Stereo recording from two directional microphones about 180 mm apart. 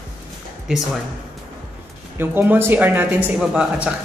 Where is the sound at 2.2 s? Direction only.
10° right (ahead or behind).